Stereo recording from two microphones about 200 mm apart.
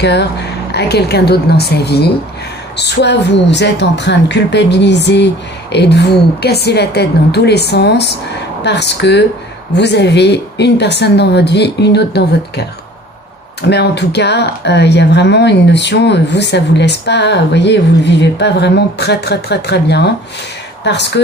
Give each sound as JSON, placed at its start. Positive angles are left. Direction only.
{"t": 0.0, "sound": "speech", "side_deg": 60}